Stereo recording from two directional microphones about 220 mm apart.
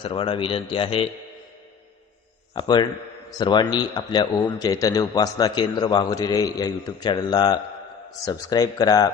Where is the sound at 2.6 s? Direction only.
20° left (ahead or behind).